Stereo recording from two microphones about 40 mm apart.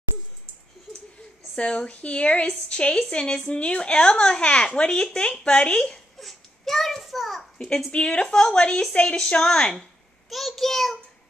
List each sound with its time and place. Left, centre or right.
1.6 s a woman's voice: left
6.1 s a sound: centre
7.9 s a woman's voice: left
10.3 s a child's voice: centre